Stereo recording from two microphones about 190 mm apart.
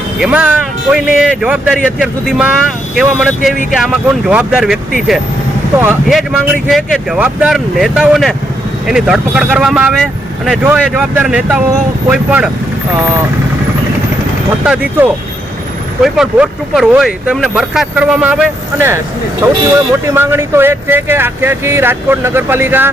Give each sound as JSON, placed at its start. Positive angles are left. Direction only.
{"t": 0.2, "sound": "speech", "side_deg": -5}
{"t": 14.6, "sound": "speech", "side_deg": -5}